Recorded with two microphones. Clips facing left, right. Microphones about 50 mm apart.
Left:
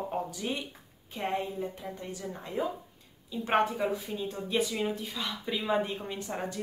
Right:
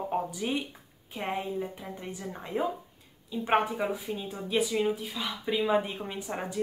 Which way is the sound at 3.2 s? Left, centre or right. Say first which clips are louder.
Right 1 dB; centre.